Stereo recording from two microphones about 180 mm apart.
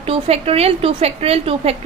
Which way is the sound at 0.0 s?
30° right (ahead or behind).